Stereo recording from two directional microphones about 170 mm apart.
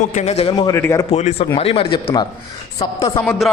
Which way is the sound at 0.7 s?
15° left (ahead or behind).